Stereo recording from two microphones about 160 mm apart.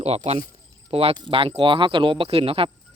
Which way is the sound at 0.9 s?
35° right (ahead or behind).